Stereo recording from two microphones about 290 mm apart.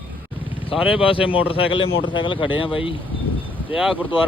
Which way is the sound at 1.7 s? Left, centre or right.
Left.